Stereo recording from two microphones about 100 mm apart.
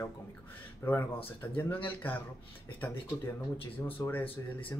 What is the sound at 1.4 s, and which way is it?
Speech, 25° left (ahead or behind).